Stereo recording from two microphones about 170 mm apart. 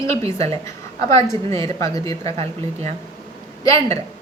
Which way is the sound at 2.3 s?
40° right (ahead or behind).